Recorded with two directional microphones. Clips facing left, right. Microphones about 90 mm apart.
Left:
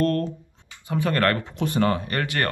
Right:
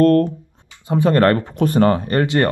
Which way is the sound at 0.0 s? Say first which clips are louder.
Right 10 dB; 50° right (ahead or behind).